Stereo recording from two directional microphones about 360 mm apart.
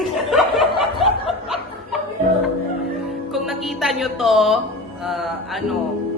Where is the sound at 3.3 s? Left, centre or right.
Centre.